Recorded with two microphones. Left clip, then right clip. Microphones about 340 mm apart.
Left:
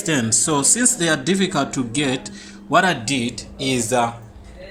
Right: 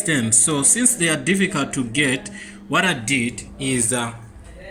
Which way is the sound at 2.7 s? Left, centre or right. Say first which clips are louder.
Left 2 dB; centre.